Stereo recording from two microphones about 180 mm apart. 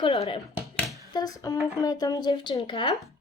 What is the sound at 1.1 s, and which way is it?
Speech, 20° left (ahead or behind).